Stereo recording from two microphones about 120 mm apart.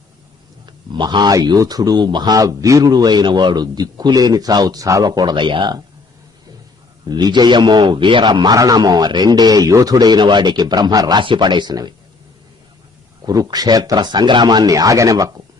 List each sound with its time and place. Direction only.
0.6 s speech: 40° right (ahead or behind)
7.0 s speech: 35° right (ahead or behind)
13.2 s speech: 30° right (ahead or behind)